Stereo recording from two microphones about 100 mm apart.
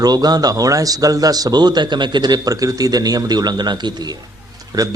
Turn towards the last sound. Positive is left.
turn(degrees=-35)  # may be behind; listen again after turning